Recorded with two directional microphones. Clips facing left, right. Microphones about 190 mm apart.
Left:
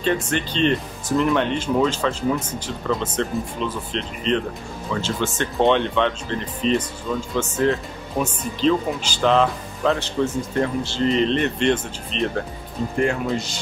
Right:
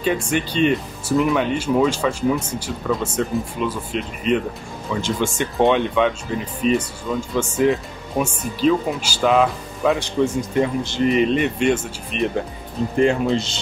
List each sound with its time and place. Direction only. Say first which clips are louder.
0.0 s speech: right 1 dB; 10° right (ahead or behind)
13.0 s speech: right 5 dB; 25° right (ahead or behind)